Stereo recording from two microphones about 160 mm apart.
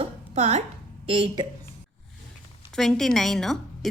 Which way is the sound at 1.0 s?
35° right (ahead or behind).